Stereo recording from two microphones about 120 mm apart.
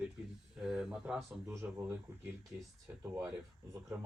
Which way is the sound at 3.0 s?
20° right (ahead or behind).